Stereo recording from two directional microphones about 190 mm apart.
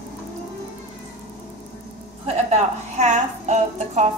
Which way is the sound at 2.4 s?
35° right (ahead or behind).